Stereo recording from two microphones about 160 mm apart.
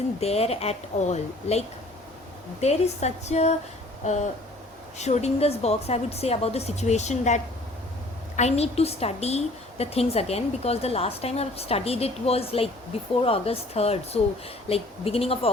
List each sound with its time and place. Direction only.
0.2 s a woman's voice: 40° left (ahead or behind)